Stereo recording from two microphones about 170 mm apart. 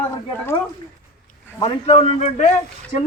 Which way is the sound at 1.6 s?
35° left (ahead or behind).